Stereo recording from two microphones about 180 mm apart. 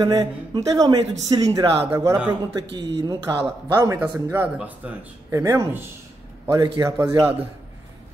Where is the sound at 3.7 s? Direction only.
20° right (ahead or behind).